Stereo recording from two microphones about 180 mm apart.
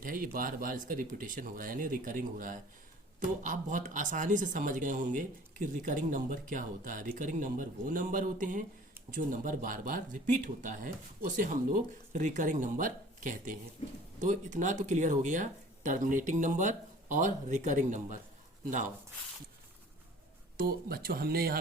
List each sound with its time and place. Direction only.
0.0 s speech: 50° right (ahead or behind)
13.8 s speech: 35° left (ahead or behind)
14.2 s speech: 45° right (ahead or behind)
20.6 s speech: 55° right (ahead or behind)